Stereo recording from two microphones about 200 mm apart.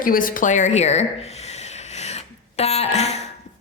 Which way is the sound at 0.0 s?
45° left (ahead or behind).